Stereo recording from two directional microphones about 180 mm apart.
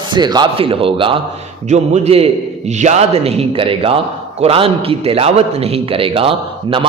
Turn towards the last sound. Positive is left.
turn(degrees=-30)  # may be behind; listen again after turning